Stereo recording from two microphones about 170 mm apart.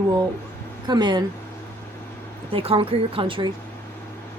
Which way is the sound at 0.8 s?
25° right (ahead or behind).